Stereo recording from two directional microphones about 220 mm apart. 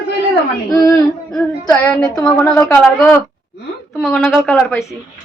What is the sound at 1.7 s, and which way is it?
A woman's voice, 5° left (ahead or behind).